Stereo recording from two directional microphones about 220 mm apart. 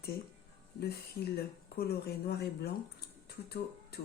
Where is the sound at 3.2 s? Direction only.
45° left (ahead or behind).